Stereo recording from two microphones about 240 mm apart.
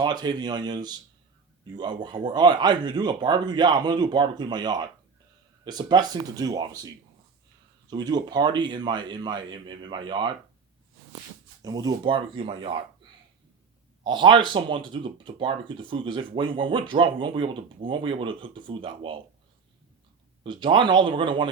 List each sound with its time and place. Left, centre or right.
0.0 s speech: centre
11.6 s speech: centre
14.0 s speech: centre
20.4 s speech: centre